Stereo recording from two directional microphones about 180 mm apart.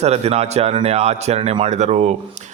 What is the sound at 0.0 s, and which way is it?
A man's voice, 35° right (ahead or behind).